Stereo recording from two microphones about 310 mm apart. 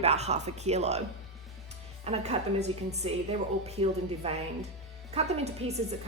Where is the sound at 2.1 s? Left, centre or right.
Right.